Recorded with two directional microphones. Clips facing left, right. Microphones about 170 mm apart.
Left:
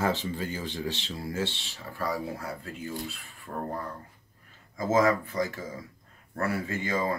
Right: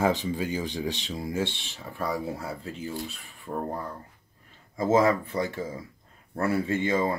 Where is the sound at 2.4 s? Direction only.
25° right (ahead or behind).